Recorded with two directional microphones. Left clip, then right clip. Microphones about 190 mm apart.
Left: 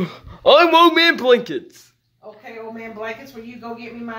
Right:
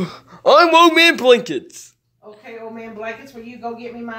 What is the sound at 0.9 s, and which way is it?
A man's voice, 20° right (ahead or behind).